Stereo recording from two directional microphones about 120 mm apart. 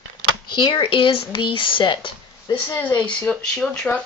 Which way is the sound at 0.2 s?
40° left (ahead or behind).